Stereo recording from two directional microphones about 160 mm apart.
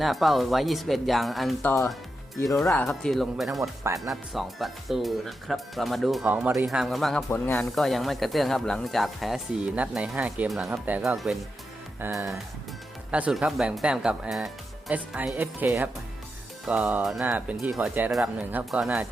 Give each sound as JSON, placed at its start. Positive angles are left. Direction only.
{"t": 0.0, "sound": "speech", "side_deg": 0}
{"t": 1.6, "sound": "speech", "side_deg": 15}
{"t": 2.6, "sound": "speech", "side_deg": 5}
{"t": 3.6, "sound": "speech", "side_deg": -20}
{"t": 4.1, "sound": "speech", "side_deg": 0}
{"t": 7.3, "sound": "speech", "side_deg": 10}
{"t": 11.9, "sound": "music", "side_deg": -15}
{"t": 13.1, "sound": "speech", "side_deg": -10}